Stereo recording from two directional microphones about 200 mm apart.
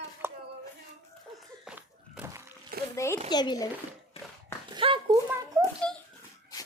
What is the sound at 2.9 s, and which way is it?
Speech, 15° left (ahead or behind).